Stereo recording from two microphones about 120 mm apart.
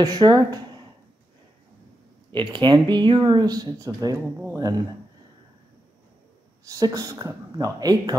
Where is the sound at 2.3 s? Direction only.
40° right (ahead or behind).